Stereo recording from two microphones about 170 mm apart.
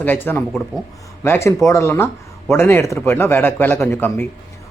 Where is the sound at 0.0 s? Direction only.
10° left (ahead or behind).